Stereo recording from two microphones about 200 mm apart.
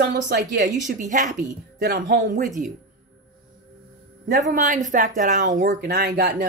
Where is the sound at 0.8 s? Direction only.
40° right (ahead or behind).